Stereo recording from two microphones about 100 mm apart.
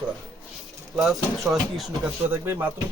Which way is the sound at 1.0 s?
5° right (ahead or behind).